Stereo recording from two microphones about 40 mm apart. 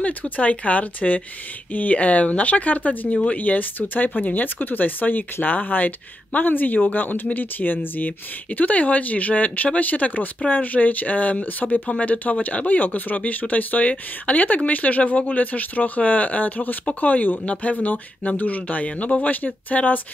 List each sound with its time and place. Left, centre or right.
0.0 s speech: left
8.5 s speech: left